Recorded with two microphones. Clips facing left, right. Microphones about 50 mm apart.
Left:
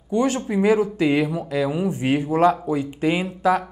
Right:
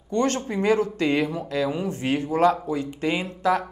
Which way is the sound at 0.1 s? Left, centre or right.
Centre.